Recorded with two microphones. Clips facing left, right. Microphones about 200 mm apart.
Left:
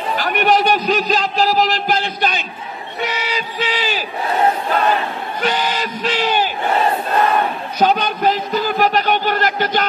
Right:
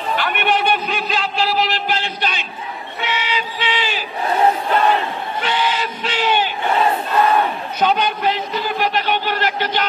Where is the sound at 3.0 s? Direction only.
40° left (ahead or behind).